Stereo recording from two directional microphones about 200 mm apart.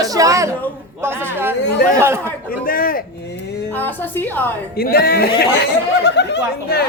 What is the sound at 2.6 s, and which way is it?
Speech, 45° left (ahead or behind).